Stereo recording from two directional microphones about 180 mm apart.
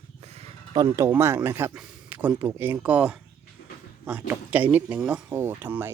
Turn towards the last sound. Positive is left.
turn(degrees=-10)  # may be behind; listen again after turning